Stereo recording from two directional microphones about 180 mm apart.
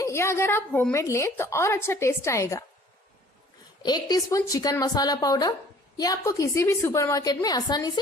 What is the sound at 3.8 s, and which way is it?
A woman's voice, 20° left (ahead or behind).